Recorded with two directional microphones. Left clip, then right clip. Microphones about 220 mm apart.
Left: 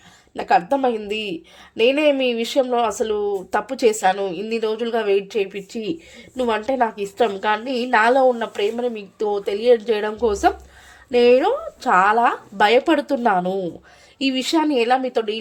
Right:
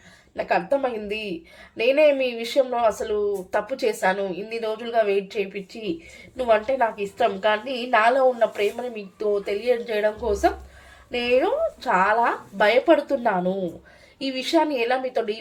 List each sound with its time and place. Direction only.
0.3 s a woman's voice: 45° left (ahead or behind)